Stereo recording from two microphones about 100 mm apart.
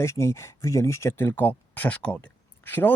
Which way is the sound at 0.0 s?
25° left (ahead or behind).